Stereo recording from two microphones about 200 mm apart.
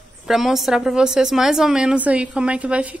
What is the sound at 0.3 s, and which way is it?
A woman's voice, centre (ahead or behind).